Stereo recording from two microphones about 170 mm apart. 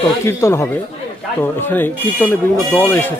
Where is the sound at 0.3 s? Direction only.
15° left (ahead or behind).